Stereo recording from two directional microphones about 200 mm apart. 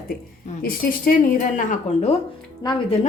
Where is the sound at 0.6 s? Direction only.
45° left (ahead or behind).